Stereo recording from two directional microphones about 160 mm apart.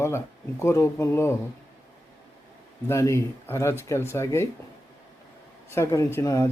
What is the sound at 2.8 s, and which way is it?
Speech, 20° left (ahead or behind).